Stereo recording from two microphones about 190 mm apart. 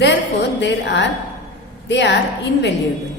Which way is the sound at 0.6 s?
65° left (ahead or behind).